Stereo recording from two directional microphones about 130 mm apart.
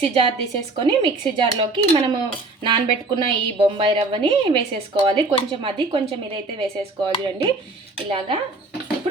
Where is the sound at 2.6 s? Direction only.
35° right (ahead or behind).